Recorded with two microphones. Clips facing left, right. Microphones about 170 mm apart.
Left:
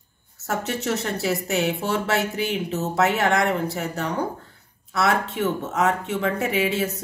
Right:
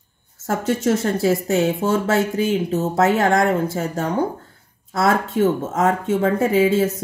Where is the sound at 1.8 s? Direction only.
40° right (ahead or behind).